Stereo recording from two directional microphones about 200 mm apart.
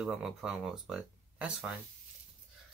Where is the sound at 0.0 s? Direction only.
Centre (ahead or behind).